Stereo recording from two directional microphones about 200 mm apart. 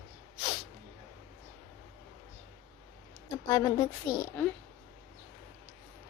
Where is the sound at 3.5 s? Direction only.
20° left (ahead or behind).